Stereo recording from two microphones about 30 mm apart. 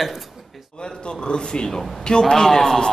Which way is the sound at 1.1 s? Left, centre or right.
Left.